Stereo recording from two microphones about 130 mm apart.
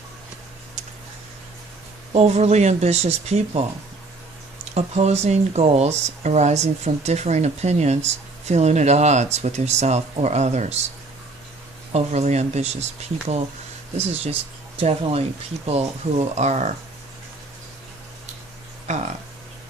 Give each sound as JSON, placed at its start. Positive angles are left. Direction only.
{"t": 2.1, "sound": "speech", "side_deg": -55}
{"t": 4.7, "sound": "speech", "side_deg": -55}
{"t": 11.9, "sound": "speech", "side_deg": -60}
{"t": 14.8, "sound": "speech", "side_deg": -50}
{"t": 18.9, "sound": "speech", "side_deg": -65}